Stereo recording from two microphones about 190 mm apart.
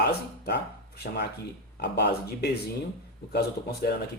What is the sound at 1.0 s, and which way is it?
Speech, 50° left (ahead or behind).